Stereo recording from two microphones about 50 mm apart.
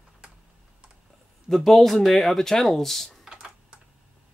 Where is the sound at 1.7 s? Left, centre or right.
Centre.